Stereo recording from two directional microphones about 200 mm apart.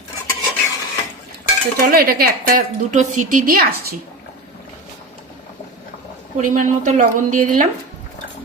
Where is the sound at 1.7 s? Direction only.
50° right (ahead or behind).